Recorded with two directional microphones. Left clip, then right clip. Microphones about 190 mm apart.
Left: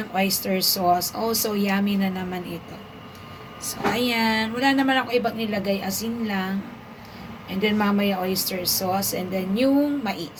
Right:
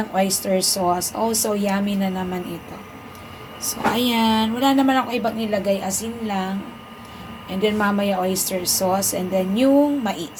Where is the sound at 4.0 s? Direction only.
10° right (ahead or behind); by 10.3 s 25° right (ahead or behind).